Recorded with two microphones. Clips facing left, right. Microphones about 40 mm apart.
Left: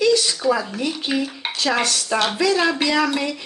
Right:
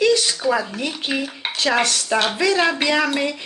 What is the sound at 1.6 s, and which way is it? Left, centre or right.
Speech, right.